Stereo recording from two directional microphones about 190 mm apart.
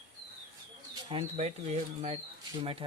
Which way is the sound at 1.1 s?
35° right (ahead or behind).